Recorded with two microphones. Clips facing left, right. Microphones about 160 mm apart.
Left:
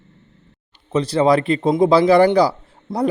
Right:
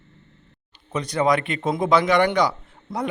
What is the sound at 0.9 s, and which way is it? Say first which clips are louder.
A man's voice: left 6 dB; 30° left (ahead or behind).